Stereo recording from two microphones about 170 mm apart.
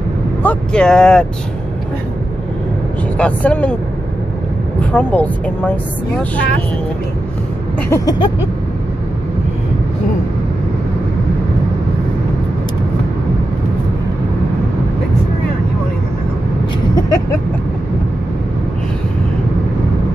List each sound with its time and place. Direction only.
0.4 s speech: 5° left (ahead or behind)
3.2 s speech: 10° left (ahead or behind)
4.9 s speech: 10° left (ahead or behind)
7.9 s a sound: 20° left (ahead or behind)